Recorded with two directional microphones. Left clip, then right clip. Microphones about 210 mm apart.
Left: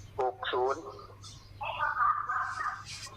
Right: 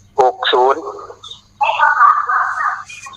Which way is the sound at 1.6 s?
50° right (ahead or behind).